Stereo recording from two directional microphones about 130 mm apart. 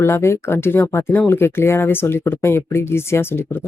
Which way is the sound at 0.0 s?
20° left (ahead or behind).